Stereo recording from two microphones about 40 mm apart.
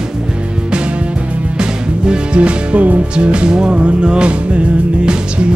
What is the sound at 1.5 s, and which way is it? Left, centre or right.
Music, right.